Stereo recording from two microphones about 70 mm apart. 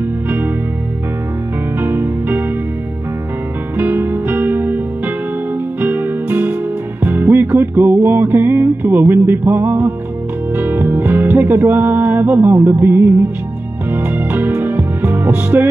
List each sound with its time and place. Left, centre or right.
1.8 s music: right
3.7 s music: right